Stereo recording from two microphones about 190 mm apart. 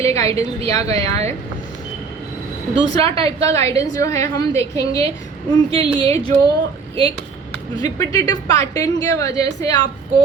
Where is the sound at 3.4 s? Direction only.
15° left (ahead or behind).